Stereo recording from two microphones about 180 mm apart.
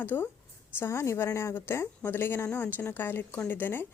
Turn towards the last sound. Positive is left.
turn(degrees=10)  # may be behind; listen again after turning